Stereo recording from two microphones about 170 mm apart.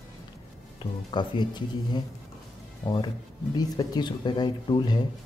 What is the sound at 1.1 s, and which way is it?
Speech, 25° left (ahead or behind).